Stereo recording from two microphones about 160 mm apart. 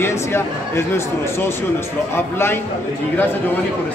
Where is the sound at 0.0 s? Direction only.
15° left (ahead or behind).